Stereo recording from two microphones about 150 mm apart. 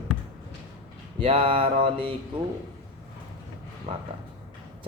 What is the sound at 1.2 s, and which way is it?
Speech, 35° right (ahead or behind).